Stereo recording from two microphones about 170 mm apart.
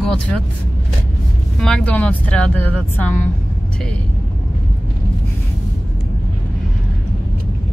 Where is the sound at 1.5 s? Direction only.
5° left (ahead or behind).